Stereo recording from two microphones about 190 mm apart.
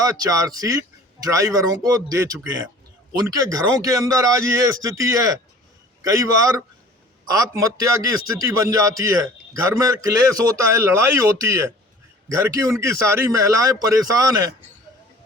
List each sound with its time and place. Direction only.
0.0 s a man's voice: 20° right (ahead or behind)